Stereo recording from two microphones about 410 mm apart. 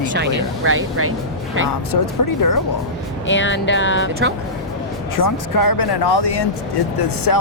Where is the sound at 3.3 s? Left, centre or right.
Left.